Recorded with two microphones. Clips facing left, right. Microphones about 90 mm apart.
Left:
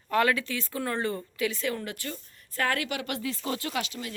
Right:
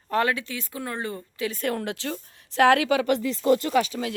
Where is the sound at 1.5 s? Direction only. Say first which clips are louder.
Right 4 dB; 55° right (ahead or behind); by 2.8 s 85° right.